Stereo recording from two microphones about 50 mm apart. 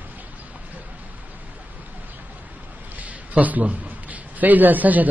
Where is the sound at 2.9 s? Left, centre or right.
Right.